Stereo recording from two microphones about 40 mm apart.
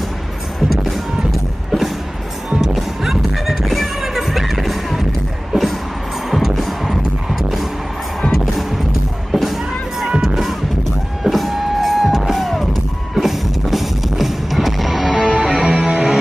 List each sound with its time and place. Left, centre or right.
0.6 s music: centre
9.3 s music: centre
15.1 s music: right